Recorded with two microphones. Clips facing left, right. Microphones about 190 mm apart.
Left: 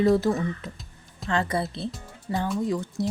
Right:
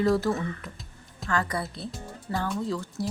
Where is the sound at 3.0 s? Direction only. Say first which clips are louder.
Left 4 dB; 20° left (ahead or behind).